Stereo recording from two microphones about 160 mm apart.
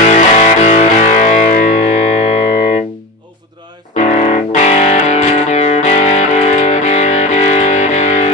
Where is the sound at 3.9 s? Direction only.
45° left (ahead or behind).